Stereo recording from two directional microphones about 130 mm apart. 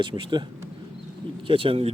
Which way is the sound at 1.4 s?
40° right (ahead or behind).